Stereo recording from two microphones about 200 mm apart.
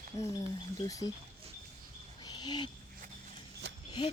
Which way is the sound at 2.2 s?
20° left (ahead or behind).